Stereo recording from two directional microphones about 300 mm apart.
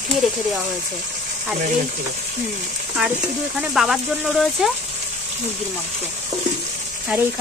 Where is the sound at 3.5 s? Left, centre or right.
Centre.